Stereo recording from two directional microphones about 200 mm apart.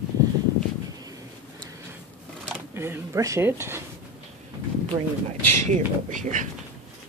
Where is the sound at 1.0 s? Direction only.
20° right (ahead or behind).